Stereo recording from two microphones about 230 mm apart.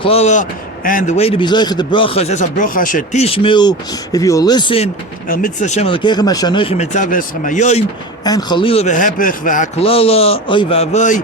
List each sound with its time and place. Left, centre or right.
0.0 s speech: left
5.3 s speech: left
8.2 s speech: centre